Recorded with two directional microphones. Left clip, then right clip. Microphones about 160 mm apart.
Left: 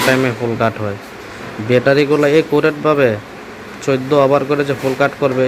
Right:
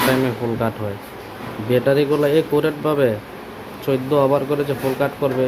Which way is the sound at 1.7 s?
20° left (ahead or behind).